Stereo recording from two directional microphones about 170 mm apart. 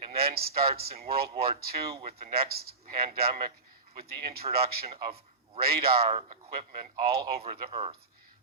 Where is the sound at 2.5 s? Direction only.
65° right (ahead or behind).